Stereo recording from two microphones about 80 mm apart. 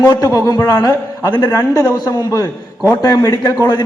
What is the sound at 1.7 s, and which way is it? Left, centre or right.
A man's voice, left.